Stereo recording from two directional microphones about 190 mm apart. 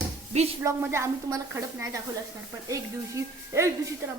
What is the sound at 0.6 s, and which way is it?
Speech, 15° right (ahead or behind).